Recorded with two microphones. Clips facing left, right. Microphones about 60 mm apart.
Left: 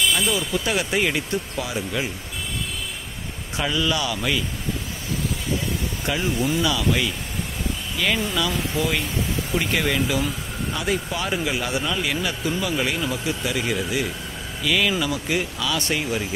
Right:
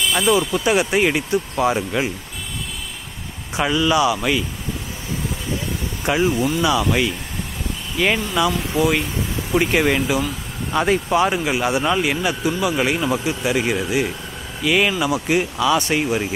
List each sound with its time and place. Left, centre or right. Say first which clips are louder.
0.1 s speech: right 5 dB; right
1.6 s speech: right 7 dB; right
3.5 s speech: right 6 dB; centre
6.1 s speech: right 5 dB; right
8.4 s speech: right 5 dB; centre
10.7 s speech: right 8 dB; right
11.1 s speech: right 7 dB; right
12.7 s speech: right 5 dB; right